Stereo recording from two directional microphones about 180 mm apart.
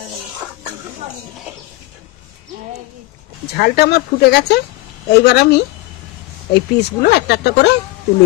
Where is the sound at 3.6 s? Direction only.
60° left (ahead or behind).